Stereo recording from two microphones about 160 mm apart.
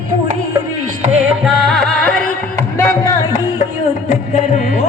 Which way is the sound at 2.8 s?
20° left (ahead or behind).